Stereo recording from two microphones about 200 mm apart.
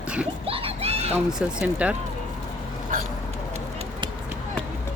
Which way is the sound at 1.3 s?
5° right (ahead or behind).